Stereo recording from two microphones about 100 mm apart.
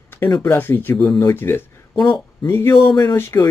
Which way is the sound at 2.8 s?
45° left (ahead or behind).